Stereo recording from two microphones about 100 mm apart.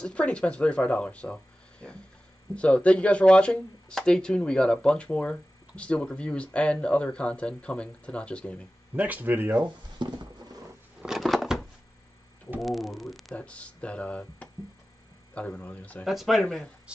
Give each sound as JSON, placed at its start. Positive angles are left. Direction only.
{"t": 0.0, "sound": "speech", "side_deg": 10}
{"t": 8.9, "sound": "speech", "side_deg": -15}
{"t": 10.0, "sound": "patter", "side_deg": -50}
{"t": 11.0, "sound": "a sound", "side_deg": -5}
{"t": 12.5, "sound": "speech", "side_deg": 0}
{"t": 13.4, "sound": "speech", "side_deg": 10}
{"t": 16.1, "sound": "speech", "side_deg": 0}